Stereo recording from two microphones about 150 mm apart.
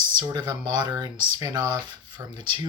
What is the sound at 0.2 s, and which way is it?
Speech, 25° right (ahead or behind).